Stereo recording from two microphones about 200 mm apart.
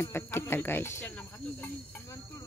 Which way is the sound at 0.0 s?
10° left (ahead or behind).